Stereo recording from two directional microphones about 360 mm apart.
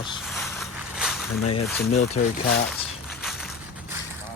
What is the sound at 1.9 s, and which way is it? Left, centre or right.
Speech, centre.